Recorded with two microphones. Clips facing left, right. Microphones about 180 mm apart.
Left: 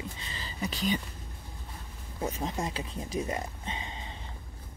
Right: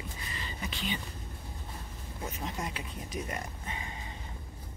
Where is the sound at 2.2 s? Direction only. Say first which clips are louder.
Left 5 dB; 30° left (ahead or behind).